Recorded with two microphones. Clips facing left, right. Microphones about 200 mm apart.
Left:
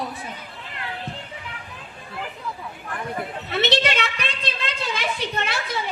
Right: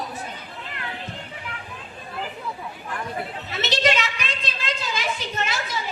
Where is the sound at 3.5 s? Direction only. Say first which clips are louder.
Left 1 dB; 60° left (ahead or behind).